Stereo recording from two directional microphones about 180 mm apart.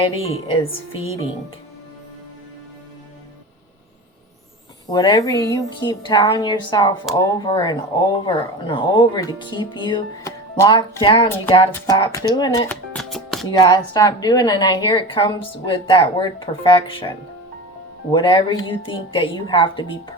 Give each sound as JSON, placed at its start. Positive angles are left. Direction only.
{"t": 0.4, "sound": "speech", "side_deg": 30}
{"t": 4.9, "sound": "speech", "side_deg": 25}
{"t": 12.6, "sound": "music", "side_deg": 5}
{"t": 13.5, "sound": "speech", "side_deg": 25}